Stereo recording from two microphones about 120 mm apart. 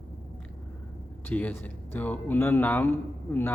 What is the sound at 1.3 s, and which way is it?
Speech, 15° left (ahead or behind).